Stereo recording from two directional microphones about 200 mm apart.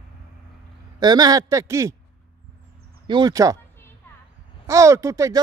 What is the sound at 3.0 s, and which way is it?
Speech, 20° right (ahead or behind).